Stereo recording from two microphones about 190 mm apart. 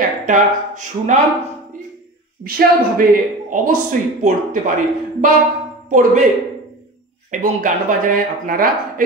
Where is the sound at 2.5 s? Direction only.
50° right (ahead or behind).